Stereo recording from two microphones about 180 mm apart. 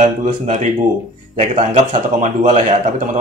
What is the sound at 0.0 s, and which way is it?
A man's voice, 40° right (ahead or behind).